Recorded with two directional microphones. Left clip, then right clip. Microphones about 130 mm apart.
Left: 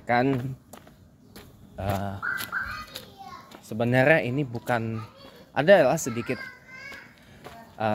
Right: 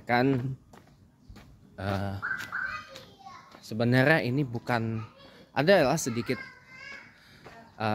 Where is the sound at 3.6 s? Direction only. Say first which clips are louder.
Left 3 dB; 30° right (ahead or behind).